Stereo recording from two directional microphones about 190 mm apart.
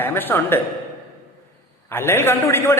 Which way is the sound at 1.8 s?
10° left (ahead or behind).